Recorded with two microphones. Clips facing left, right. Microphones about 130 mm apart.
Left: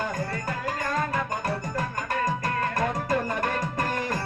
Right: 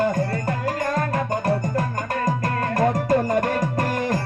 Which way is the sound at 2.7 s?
40° right (ahead or behind).